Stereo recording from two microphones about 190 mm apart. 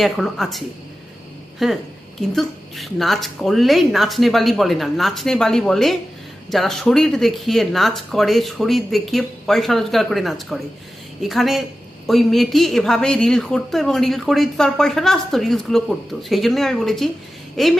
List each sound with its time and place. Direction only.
0.0 s a woman's voice: centre (ahead or behind)